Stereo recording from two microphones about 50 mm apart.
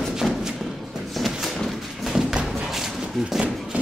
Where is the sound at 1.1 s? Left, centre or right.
Centre.